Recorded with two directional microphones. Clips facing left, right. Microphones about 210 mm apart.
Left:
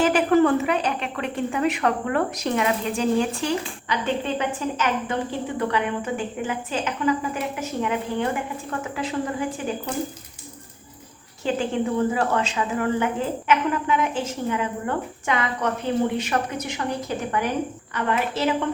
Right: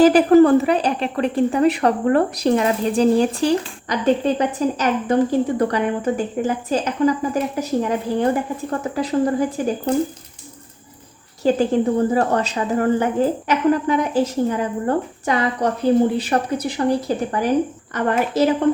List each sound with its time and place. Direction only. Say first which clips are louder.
0.0 s a woman's voice: right 7 dB; 35° right (ahead or behind)
11.4 s a woman's voice: right 7 dB; 40° right (ahead or behind)